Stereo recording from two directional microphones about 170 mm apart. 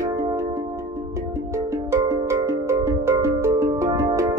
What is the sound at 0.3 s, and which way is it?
Music, 15° right (ahead or behind).